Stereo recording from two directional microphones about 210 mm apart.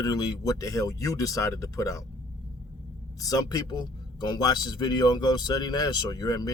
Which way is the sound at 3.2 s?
15° left (ahead or behind).